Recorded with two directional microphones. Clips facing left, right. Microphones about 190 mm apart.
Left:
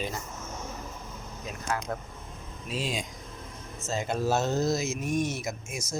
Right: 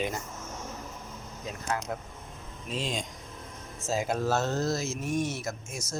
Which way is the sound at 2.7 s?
10° left (ahead or behind).